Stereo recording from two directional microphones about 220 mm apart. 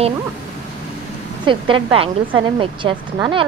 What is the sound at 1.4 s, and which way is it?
A woman's voice, 25° right (ahead or behind).